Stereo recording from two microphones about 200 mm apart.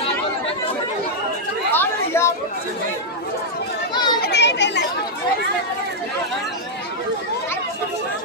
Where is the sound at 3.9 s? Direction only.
20° left (ahead or behind).